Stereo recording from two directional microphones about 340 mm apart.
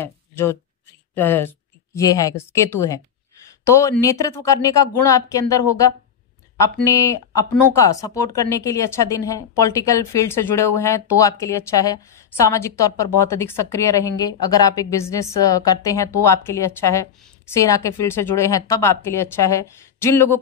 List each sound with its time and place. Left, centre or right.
0.0 s a woman's voice: centre
6.6 s a woman's voice: centre